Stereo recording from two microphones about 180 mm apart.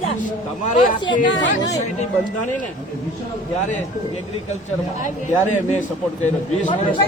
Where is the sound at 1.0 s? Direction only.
25° left (ahead or behind).